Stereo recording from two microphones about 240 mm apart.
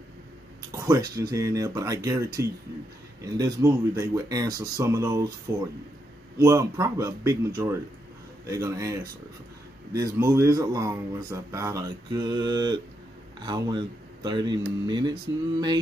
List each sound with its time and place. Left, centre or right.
0.7 s speech: centre
6.3 s speech: centre